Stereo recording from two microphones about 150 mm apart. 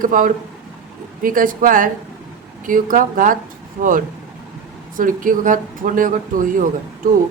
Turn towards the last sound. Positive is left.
turn(degrees=-60)  # may be behind; listen again after turning